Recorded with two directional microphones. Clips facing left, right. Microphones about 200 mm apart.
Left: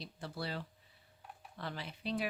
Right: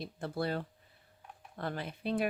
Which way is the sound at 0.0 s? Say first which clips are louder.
Right 7 dB; 50° right (ahead or behind).